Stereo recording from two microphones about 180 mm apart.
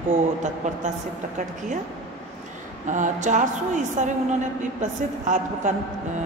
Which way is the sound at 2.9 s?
45° right (ahead or behind).